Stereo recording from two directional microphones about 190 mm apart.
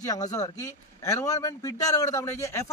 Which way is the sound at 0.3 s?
15° left (ahead or behind).